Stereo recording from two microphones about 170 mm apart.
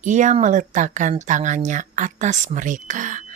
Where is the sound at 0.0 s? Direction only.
45° right (ahead or behind).